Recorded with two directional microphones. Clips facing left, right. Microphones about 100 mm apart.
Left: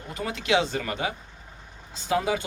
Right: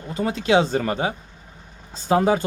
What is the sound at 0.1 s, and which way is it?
Speech, 30° right (ahead or behind).